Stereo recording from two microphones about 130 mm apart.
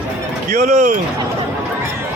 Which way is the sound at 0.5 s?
80° right.